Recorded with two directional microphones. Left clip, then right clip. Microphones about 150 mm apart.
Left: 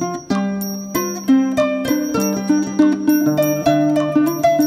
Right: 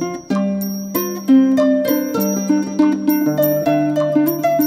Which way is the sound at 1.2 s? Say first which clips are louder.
Right 3 dB; centre (ahead or behind).